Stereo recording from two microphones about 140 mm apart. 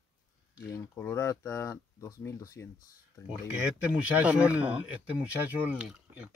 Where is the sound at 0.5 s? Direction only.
20° left (ahead or behind).